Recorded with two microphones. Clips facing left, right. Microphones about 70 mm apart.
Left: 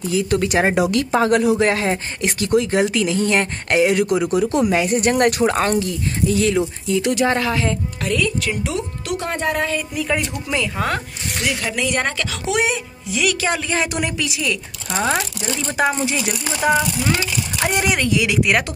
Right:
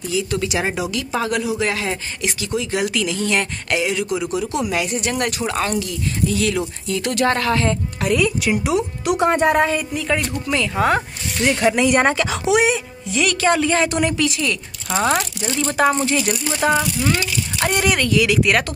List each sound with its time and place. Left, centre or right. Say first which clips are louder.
0.1 s speech: left 3 dB; left
1.7 s speech: left 4 dB; left
2.8 s speech: left 3 dB; left
6.6 s speech: left 4 dB; centre
8.0 s speech: right 3 dB; centre
9.9 s a woman's voice: even; centre
10.8 s speech: right 7 dB; centre
11.4 s speech: right 7 dB; right
12.5 s a woman's voice: right 3 dB; centre